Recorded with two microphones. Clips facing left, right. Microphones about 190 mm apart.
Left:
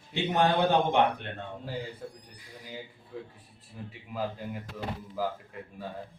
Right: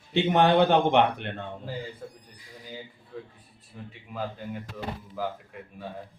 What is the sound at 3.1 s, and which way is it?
Speech, 10° left (ahead or behind).